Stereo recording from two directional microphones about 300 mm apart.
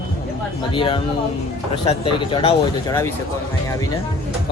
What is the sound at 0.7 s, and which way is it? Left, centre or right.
Speech, centre.